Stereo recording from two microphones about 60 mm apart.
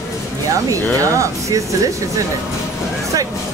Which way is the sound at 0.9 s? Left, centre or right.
Right.